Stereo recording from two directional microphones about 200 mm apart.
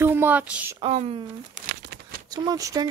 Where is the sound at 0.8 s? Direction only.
30° right (ahead or behind).